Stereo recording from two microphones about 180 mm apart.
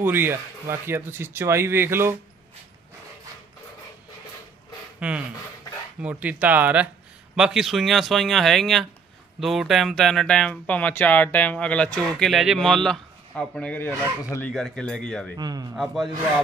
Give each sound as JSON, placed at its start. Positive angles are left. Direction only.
{"t": 0.0, "sound": "speech", "side_deg": -10}
{"t": 5.0, "sound": "speech", "side_deg": -5}
{"t": 14.5, "sound": "speech", "side_deg": 5}
{"t": 15.3, "sound": "a man's voice", "side_deg": -20}
{"t": 15.7, "sound": "speech", "side_deg": 0}